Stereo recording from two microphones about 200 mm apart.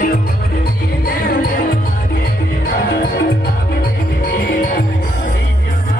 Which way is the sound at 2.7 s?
55° left (ahead or behind).